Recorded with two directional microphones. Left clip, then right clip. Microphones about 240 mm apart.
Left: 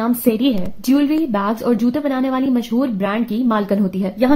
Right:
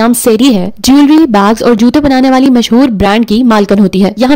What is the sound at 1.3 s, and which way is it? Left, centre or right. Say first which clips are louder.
A woman's voice: right 12 dB; right.